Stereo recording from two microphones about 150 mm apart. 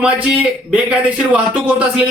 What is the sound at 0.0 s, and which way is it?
Speech, 5° right (ahead or behind).